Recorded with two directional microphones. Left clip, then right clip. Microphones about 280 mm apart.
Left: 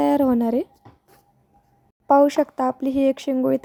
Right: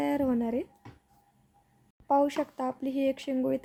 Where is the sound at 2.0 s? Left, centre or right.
Left.